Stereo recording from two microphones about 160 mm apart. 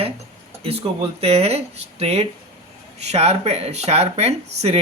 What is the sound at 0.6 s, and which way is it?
Speech, 40° right (ahead or behind).